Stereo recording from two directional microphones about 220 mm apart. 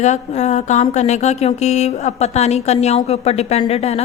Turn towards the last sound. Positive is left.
turn(degrees=30)  # may be behind; listen again after turning